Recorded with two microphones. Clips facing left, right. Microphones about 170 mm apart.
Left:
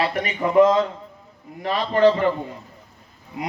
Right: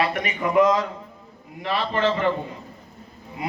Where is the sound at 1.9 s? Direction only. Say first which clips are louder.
Left 8 dB; 40° left (ahead or behind).